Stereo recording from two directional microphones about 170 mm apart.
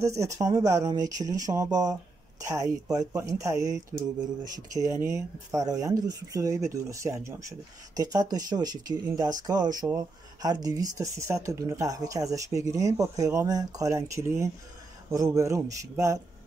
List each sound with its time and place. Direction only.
0.0 s speech: 20° right (ahead or behind)